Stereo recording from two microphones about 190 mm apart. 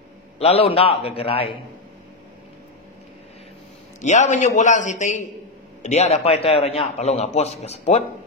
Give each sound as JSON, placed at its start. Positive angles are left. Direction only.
{"t": 0.4, "sound": "a man's voice", "side_deg": 30}
{"t": 4.0, "sound": "a man's voice", "side_deg": 40}